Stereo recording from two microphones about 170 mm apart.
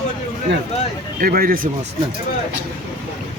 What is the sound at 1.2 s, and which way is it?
Speech, 60° right (ahead or behind).